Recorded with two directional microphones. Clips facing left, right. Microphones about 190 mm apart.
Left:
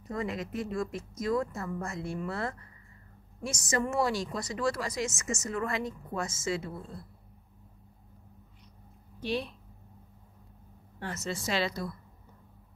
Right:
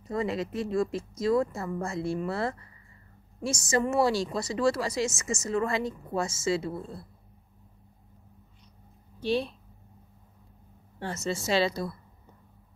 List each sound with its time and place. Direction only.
0.1 s a woman's voice: 30° right (ahead or behind)
9.2 s a woman's voice: 30° right (ahead or behind)
11.0 s a woman's voice: 30° right (ahead or behind)